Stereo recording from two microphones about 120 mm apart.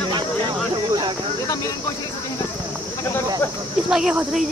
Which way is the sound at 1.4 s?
30° left (ahead or behind).